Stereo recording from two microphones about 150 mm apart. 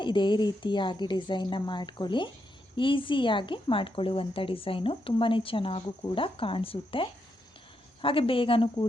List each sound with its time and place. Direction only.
0.0 s a woman's voice: 30° left (ahead or behind)